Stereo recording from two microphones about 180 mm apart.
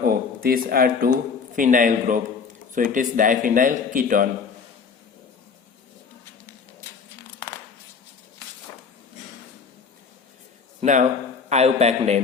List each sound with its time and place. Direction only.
0.0 s a sound: 55° right (ahead or behind)
1.5 s speech: 45° right (ahead or behind)
10.8 s a man's voice: 40° right (ahead or behind)